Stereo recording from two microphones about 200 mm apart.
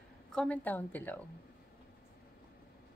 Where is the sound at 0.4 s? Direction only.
10° left (ahead or behind).